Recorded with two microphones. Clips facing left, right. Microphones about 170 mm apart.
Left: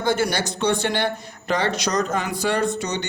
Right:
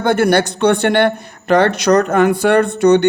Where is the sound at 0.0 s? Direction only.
60° right (ahead or behind).